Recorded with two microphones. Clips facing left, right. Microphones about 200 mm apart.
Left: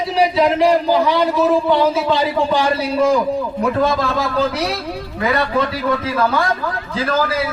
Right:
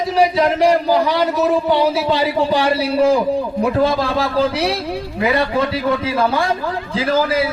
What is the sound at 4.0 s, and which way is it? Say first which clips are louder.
A man's voice: right 1 dB; 30° right (ahead or behind).